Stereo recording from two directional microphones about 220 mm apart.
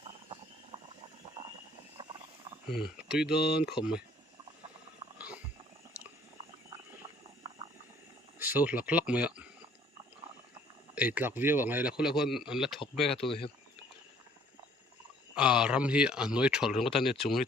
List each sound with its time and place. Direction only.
0.7 s a sound: 25° right (ahead or behind)
2.7 s speech: 5° right (ahead or behind)
5.1 s a sound: 5° right (ahead or behind)
7.4 s boiling: 15° right (ahead or behind)
8.4 s speech: 10° right (ahead or behind)
10.9 s speech: 5° right (ahead or behind)
13.1 s speech: 25° left (ahead or behind)
15.4 s speech: 5° right (ahead or behind)